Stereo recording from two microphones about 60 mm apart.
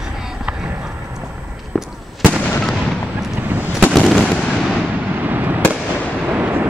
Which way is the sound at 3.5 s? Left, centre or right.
Right.